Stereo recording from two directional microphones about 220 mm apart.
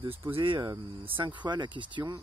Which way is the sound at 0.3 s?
20° right (ahead or behind).